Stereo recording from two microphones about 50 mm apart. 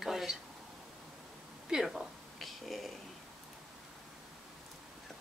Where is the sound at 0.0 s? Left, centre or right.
Centre.